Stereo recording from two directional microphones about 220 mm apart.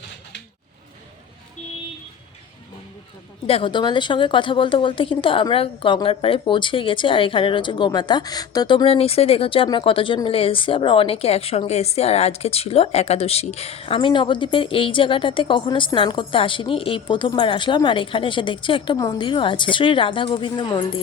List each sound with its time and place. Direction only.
3.4 s a woman's voice: 25° left (ahead or behind)